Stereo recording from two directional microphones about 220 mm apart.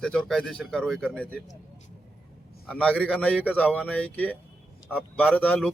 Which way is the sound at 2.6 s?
5° left (ahead or behind).